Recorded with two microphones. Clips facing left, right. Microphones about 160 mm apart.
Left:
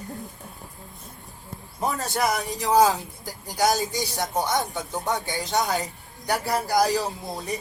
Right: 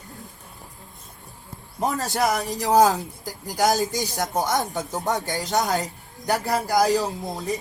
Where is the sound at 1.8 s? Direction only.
40° right (ahead or behind).